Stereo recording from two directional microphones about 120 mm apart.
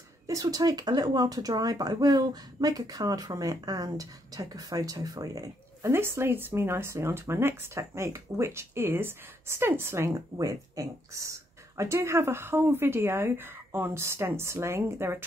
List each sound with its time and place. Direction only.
0.3 s speech: 30° right (ahead or behind)